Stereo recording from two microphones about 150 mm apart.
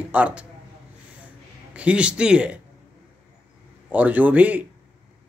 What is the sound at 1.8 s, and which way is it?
Speech, 5° right (ahead or behind).